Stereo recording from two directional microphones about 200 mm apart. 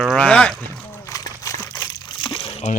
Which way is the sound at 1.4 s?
15° left (ahead or behind).